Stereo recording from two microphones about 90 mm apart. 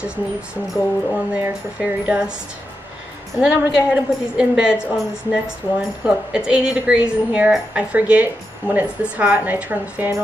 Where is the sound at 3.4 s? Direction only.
10° right (ahead or behind).